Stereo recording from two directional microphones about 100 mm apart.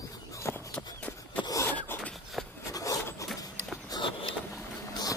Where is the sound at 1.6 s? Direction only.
20° left (ahead or behind).